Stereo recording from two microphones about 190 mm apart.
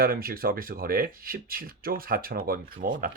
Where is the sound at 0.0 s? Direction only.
50° right (ahead or behind).